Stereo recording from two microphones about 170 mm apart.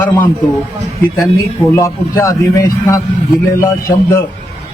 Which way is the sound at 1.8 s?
15° left (ahead or behind).